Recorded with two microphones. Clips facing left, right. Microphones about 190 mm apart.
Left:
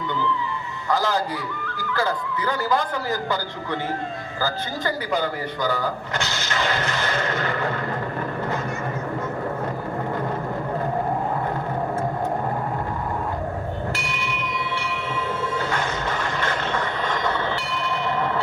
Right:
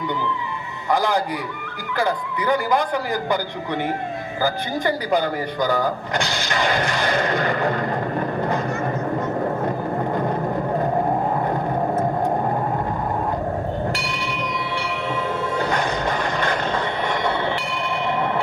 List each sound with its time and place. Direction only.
0.9 s speech: 15° right (ahead or behind)
4.4 s speech: 15° right (ahead or behind)
6.1 s a sound: 15° right (ahead or behind)
13.9 s tubular bells: 15° right (ahead or behind)
15.7 s music: 15° right (ahead or behind)
17.1 s a sound: 15° right (ahead or behind)